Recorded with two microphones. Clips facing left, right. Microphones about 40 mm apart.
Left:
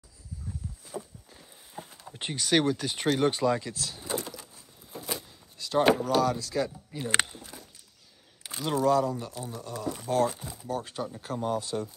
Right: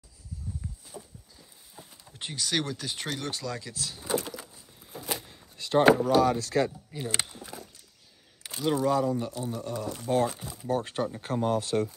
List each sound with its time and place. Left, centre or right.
0.9 s walk: left
1.8 s a sound: left
2.1 s speech: centre
3.2 s speech: left
3.6 s speech: centre
5.3 s a sound: right
6.3 s speech: right
6.9 s speech: centre
8.6 s speech: centre
9.5 s speech: right
10.6 s speech: right
11.5 s speech: right